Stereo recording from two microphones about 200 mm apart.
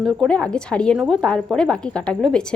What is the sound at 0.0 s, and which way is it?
A woman's voice, centre (ahead or behind).